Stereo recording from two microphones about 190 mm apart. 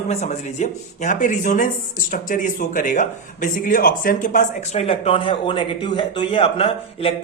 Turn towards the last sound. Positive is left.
turn(degrees=30)  # may be behind; listen again after turning